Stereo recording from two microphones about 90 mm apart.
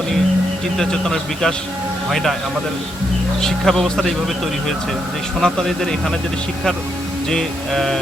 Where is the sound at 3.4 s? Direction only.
5° left (ahead or behind).